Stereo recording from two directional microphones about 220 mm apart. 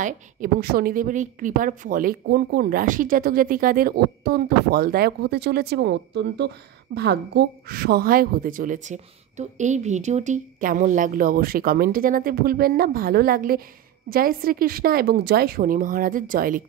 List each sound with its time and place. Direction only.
0.0 s a woman's voice: 40° right (ahead or behind)